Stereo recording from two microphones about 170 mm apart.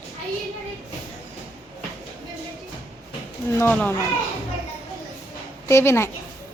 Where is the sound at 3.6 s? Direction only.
10° left (ahead or behind).